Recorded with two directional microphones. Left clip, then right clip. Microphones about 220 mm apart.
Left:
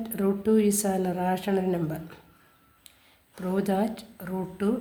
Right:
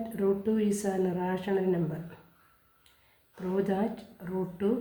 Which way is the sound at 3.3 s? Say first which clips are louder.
Left 2 dB; 45° left (ahead or behind).